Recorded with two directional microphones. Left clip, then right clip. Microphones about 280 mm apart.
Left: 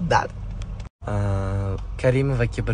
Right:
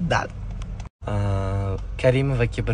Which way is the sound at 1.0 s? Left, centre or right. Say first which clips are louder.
Even; centre.